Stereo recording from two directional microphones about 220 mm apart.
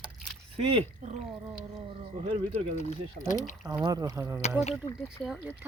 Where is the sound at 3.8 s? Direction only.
20° right (ahead or behind).